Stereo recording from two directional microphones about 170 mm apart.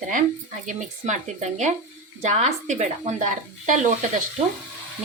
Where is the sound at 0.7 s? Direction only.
45° right (ahead or behind).